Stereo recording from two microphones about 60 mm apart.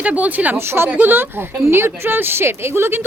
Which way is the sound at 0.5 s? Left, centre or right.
Right.